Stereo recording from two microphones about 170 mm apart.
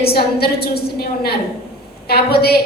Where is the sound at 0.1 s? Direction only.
65° left (ahead or behind).